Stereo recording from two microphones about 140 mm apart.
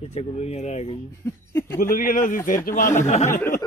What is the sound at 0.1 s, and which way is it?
Speech, 50° left (ahead or behind).